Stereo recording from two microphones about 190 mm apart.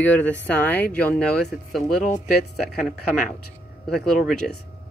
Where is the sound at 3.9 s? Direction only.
Centre (ahead or behind).